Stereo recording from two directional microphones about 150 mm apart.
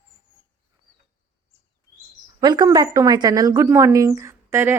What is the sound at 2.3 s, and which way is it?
Speech, 25° right (ahead or behind).